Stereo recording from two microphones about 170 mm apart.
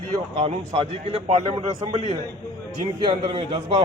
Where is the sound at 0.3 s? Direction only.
35° right (ahead or behind).